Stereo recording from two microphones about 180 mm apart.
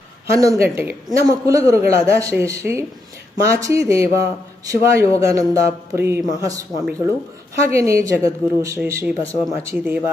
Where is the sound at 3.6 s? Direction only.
15° right (ahead or behind).